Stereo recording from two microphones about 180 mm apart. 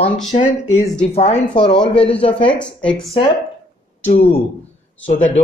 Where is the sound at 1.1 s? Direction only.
35° left (ahead or behind).